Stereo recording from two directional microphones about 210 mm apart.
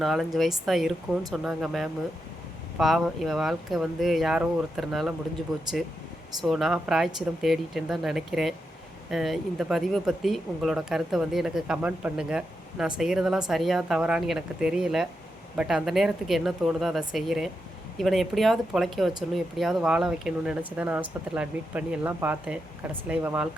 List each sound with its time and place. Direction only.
0.0 s speech: centre (ahead or behind)
6.4 s speech: centre (ahead or behind)